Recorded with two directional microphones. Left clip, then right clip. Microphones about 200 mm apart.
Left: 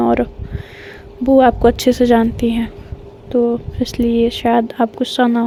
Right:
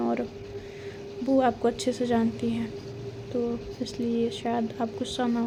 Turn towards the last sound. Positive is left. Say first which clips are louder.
# left 13 dB
turn(degrees=40)  # may be behind; listen again after turning